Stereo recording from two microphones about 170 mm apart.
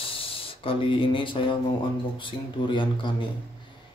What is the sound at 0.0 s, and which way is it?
Ratchet, 35° left (ahead or behind).